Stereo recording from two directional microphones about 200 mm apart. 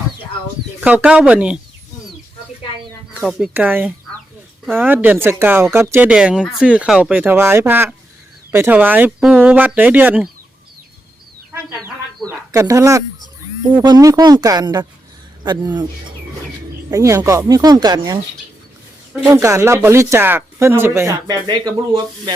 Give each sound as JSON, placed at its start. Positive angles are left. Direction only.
{"t": 0.8, "sound": "speech", "side_deg": -5}
{"t": 3.2, "sound": "speech", "side_deg": 0}
{"t": 12.2, "sound": "speech", "side_deg": -15}
{"t": 16.9, "sound": "speech", "side_deg": -15}